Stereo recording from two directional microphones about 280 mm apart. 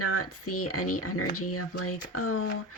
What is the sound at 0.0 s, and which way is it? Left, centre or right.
Speech, left.